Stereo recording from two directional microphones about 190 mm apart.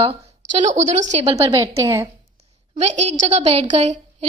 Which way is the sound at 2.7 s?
40° right (ahead or behind).